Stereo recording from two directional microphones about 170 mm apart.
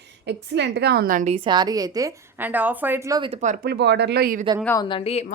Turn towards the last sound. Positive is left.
turn(degrees=35)  # may be behind; listen again after turning